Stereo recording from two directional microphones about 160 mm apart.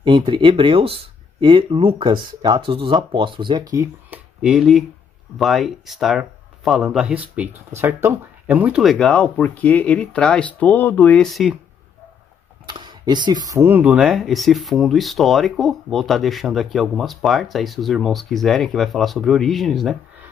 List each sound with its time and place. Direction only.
0.0 s speech: 30° right (ahead or behind)
3.8 s speech: 10° right (ahead or behind)
12.6 s speech: 30° right (ahead or behind); by 20.0 s centre (ahead or behind)